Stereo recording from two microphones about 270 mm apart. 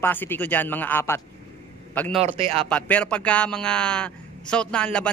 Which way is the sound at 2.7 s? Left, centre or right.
Centre.